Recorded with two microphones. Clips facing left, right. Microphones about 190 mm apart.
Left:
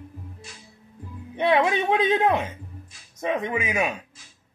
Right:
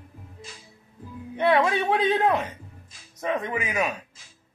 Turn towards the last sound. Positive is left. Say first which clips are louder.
# left 2 dB
turn(degrees=20)  # may be behind; listen again after turning